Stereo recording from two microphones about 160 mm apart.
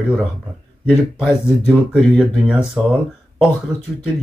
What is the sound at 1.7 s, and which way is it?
Speech, centre (ahead or behind).